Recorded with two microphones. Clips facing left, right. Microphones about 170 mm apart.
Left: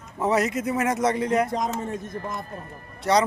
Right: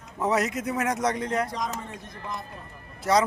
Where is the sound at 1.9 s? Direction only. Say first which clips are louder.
Left 6 dB; 50° left (ahead or behind).